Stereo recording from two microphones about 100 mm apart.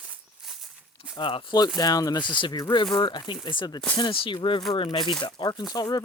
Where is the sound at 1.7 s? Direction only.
40° left (ahead or behind).